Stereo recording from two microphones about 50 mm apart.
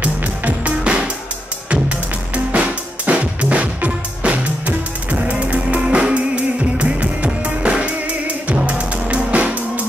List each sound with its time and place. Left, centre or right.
0.0 s music: right